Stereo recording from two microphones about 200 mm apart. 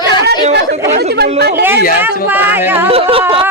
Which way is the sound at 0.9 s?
55° right (ahead or behind).